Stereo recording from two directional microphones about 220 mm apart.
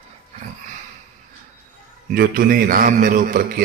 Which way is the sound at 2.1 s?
40° right (ahead or behind).